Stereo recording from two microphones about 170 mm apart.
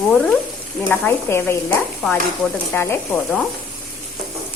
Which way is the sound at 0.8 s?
10° left (ahead or behind).